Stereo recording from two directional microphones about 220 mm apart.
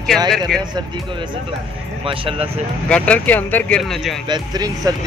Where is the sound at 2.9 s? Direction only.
5° left (ahead or behind).